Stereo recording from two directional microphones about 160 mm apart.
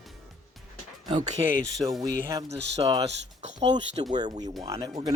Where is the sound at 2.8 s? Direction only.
35° right (ahead or behind).